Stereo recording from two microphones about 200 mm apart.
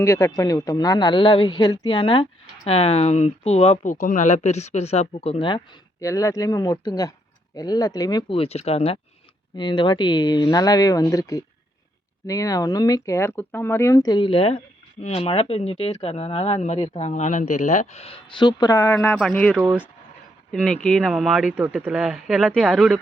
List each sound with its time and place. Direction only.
0.0 s speech: 15° left (ahead or behind)
20.8 s speech: centre (ahead or behind)